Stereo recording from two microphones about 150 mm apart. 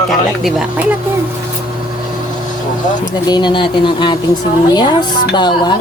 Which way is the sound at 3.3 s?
30° left (ahead or behind).